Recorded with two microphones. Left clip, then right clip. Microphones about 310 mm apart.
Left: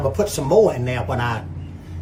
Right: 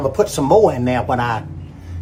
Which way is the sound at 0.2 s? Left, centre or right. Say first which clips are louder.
Right 3 dB; centre.